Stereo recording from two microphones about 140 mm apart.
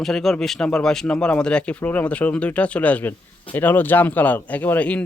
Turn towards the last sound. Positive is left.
turn(degrees=10)  # may be behind; listen again after turning